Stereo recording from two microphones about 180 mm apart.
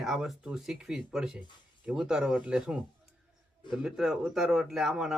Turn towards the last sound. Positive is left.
turn(degrees=0)  # may be behind; listen again after turning